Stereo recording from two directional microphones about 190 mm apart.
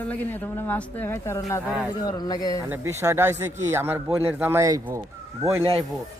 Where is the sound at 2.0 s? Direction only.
20° left (ahead or behind).